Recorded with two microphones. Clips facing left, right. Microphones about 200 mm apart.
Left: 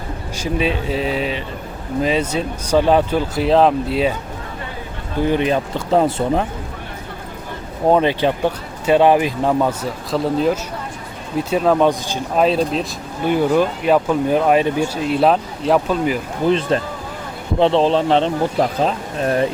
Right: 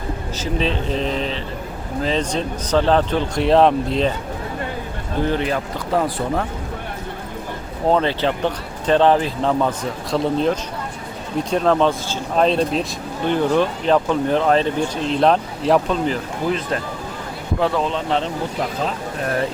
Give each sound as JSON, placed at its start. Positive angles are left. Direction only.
{"t": 0.3, "sound": "speech", "side_deg": 10}
{"t": 5.2, "sound": "speech", "side_deg": 15}
{"t": 7.9, "sound": "speech", "side_deg": 15}
{"t": 12.5, "sound": "speech", "side_deg": 0}
{"t": 16.5, "sound": "speech", "side_deg": 25}